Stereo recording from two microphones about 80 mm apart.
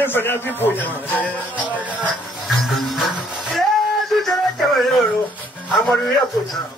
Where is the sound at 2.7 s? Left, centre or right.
Centre.